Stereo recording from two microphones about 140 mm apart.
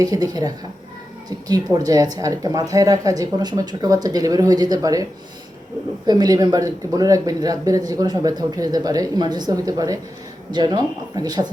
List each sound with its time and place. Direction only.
0.0 s speech: 30° right (ahead or behind)
6.1 s speech: 30° right (ahead or behind)